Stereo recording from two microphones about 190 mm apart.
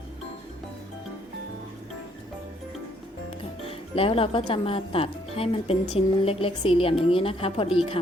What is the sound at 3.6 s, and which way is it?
A woman's voice, 30° left (ahead or behind).